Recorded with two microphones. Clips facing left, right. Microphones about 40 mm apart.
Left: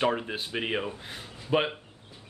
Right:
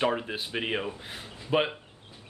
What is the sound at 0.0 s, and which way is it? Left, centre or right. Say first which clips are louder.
Speech: even; centre.